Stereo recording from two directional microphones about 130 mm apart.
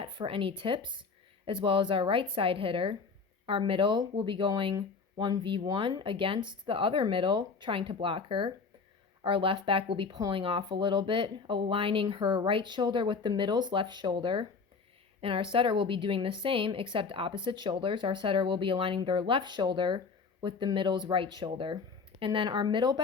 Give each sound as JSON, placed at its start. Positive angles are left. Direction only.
{"t": 0.0, "sound": "a woman's voice", "side_deg": -40}